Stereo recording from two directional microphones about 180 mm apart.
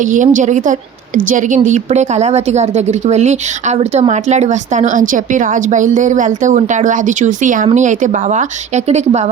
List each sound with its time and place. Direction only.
0.0 s a woman's voice: 45° right (ahead or behind)